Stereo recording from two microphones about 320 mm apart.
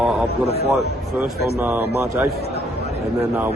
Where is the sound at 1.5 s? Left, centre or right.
Centre.